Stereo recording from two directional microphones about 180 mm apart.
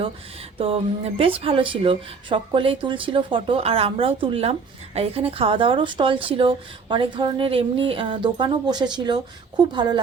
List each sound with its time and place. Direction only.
1.2 s speech: 30° right (ahead or behind)